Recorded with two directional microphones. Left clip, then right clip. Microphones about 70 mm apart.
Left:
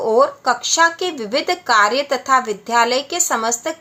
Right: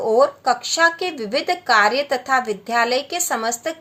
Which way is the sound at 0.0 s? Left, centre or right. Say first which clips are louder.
Left 1 dB; left.